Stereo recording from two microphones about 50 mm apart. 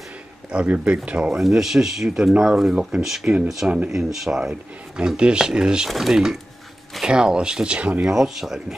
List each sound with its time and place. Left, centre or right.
0.5 s speech: right
1.4 s speech: centre
5.9 s speech: centre; by 7.9 s right
8.0 s speech: centre